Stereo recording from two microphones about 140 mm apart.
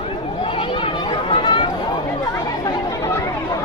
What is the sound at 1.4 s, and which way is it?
Chatter, 35° left (ahead or behind).